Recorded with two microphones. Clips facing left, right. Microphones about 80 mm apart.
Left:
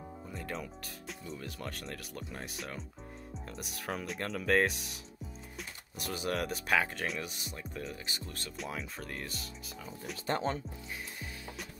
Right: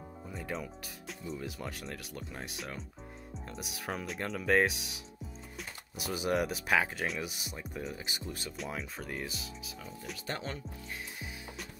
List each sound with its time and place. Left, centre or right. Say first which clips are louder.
0.3 s speech: right 2 dB; centre
10.2 s speech: left 7 dB; left